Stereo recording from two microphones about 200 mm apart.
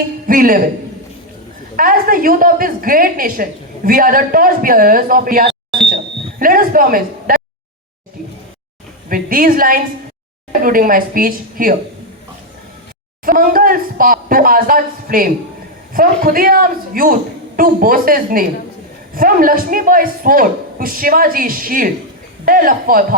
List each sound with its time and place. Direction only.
0.3 s a woman's voice: 45° right (ahead or behind)
1.7 s a woman's voice: 45° right (ahead or behind)
9.0 s a woman's voice: 45° right (ahead or behind)
13.2 s a woman's voice: 45° right (ahead or behind)